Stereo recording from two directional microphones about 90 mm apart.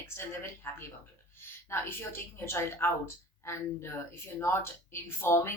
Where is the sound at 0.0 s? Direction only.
30° left (ahead or behind).